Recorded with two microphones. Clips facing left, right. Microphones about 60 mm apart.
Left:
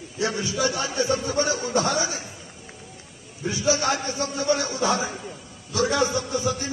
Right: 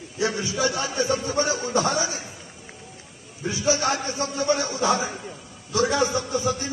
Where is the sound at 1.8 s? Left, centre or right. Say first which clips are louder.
Right 1 dB; right.